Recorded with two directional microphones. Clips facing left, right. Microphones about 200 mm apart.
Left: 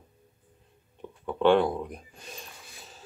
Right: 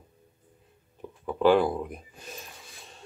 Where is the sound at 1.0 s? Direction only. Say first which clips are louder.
Right 1 dB; 5° right (ahead or behind).